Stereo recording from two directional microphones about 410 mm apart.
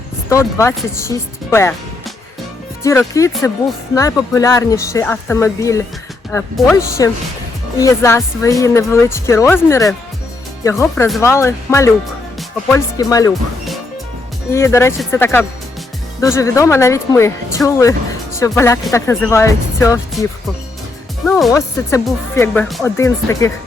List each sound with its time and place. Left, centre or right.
0.3 s speech: centre
2.8 s speech: centre
21.2 s speech: centre